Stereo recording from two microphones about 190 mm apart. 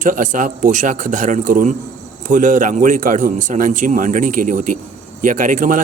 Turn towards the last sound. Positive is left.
turn(degrees=-45)  # may be behind; listen again after turning